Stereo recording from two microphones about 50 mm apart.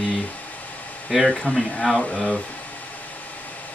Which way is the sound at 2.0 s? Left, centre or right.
Centre.